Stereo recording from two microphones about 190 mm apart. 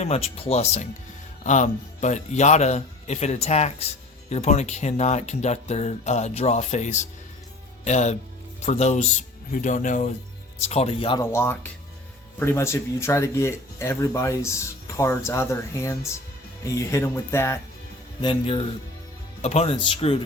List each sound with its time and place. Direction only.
0.0 s speech: 30° left (ahead or behind)
11.2 s speech: 15° left (ahead or behind)
18.2 s a man's voice: 25° left (ahead or behind)